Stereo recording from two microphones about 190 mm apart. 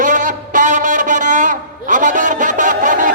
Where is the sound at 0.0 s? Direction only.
40° right (ahead or behind).